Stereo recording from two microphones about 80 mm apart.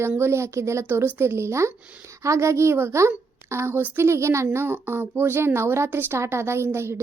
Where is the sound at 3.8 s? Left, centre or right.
Right.